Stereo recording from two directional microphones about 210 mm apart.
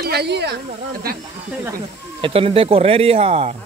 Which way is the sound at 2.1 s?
25° right (ahead or behind).